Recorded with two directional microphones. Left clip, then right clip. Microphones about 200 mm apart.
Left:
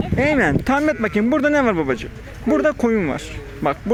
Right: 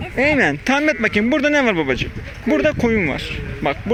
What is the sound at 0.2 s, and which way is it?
Speech, centre (ahead or behind).